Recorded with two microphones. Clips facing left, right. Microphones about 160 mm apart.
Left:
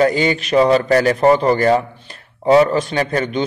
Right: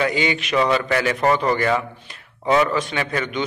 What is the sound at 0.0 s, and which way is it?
A man's voice, 40° left (ahead or behind).